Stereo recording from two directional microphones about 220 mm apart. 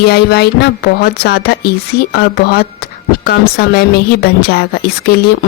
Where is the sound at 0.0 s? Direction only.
45° left (ahead or behind).